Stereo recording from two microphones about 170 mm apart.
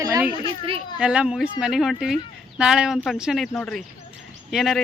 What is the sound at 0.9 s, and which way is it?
Speech, 5° right (ahead or behind).